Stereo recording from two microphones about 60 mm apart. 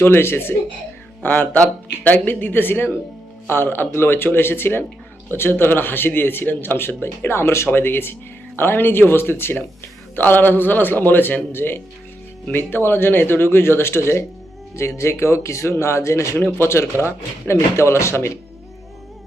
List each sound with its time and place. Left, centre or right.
0.0 s a man's voice: left